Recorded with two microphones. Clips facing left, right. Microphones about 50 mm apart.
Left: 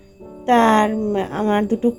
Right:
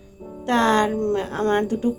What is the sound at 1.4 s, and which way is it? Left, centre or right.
Speech, centre.